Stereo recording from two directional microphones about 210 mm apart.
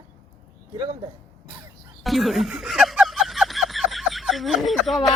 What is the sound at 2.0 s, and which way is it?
Snicker, centre (ahead or behind).